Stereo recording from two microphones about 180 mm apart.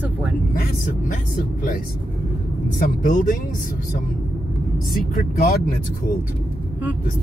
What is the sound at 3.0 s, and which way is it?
Speech, 45° left (ahead or behind).